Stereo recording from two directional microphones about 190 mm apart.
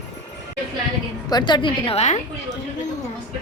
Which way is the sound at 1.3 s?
20° left (ahead or behind).